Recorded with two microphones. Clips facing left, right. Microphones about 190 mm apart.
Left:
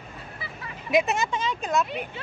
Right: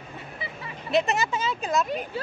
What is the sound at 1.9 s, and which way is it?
Speech, 40° right (ahead or behind).